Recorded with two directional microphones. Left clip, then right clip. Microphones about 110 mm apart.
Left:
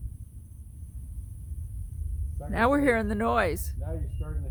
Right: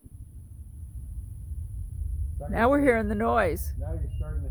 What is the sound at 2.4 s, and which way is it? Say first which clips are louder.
Speech: right 2 dB; 15° right (ahead or behind).